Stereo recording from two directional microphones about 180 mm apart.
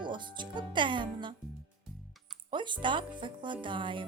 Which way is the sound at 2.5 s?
25° right (ahead or behind).